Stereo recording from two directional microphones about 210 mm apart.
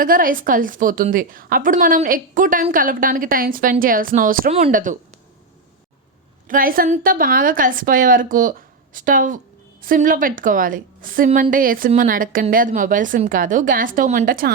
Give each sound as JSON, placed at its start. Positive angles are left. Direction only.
{"t": 0.0, "sound": "a woman's voice", "side_deg": -40}
{"t": 6.5, "sound": "a woman's voice", "side_deg": -45}